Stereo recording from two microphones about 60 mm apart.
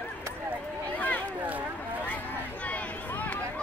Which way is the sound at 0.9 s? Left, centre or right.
Left.